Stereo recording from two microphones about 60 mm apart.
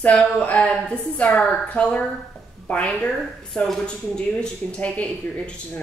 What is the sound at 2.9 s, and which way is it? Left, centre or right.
Speech, left.